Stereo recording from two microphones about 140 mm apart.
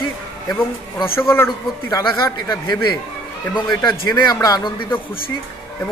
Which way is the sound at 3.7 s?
30° left (ahead or behind).